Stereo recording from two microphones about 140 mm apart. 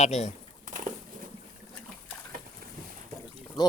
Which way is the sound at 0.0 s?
55° left (ahead or behind).